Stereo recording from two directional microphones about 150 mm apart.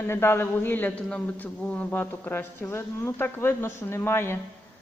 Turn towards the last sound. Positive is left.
turn(degrees=15)  # may be behind; listen again after turning